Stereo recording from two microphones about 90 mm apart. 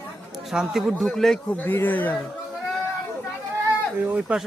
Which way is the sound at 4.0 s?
20° right (ahead or behind).